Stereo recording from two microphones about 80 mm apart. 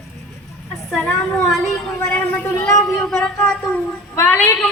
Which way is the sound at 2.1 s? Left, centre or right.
Left.